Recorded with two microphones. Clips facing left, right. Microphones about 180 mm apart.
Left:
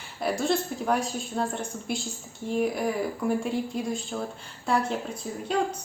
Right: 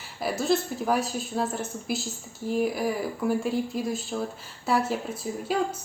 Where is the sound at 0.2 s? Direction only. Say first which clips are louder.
Right 1 dB; centre (ahead or behind).